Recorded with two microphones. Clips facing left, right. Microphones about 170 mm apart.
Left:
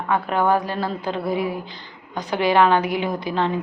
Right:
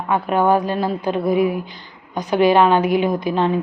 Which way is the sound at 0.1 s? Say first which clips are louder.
Right 3 dB; 15° right (ahead or behind).